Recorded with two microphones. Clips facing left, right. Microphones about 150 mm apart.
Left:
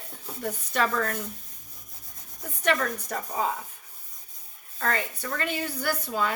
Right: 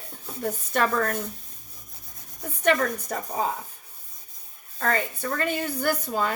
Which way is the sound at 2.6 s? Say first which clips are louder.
Right 3 dB; 40° right (ahead or behind).